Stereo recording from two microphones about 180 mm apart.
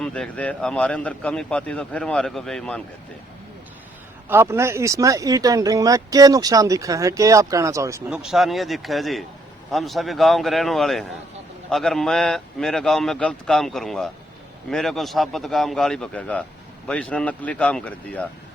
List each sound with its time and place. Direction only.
0.0 s speech: 5° left (ahead or behind)
4.3 s speech: 15° right (ahead or behind)
8.1 s speech: 5° right (ahead or behind)